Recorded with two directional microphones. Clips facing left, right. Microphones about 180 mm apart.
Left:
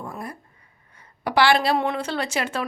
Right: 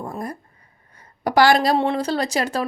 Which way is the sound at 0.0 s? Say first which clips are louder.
Right 4 dB; 40° right (ahead or behind).